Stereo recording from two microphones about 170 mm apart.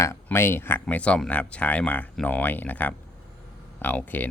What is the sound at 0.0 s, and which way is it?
Speech, 15° left (ahead or behind).